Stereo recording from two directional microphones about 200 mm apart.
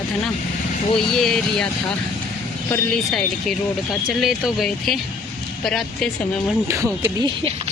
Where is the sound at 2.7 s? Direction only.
5° left (ahead or behind).